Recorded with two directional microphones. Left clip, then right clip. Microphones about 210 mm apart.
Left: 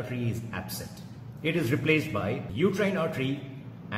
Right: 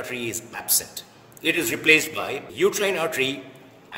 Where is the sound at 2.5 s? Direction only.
55° right (ahead or behind).